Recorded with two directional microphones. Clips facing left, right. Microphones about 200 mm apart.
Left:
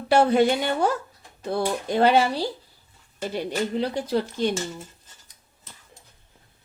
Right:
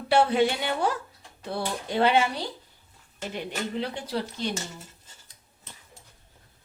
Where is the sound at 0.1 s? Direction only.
45° left (ahead or behind).